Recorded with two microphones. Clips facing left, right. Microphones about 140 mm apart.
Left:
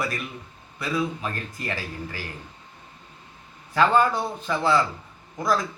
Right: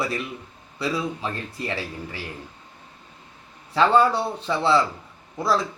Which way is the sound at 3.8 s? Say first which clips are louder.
Right 2 dB; 30° right (ahead or behind).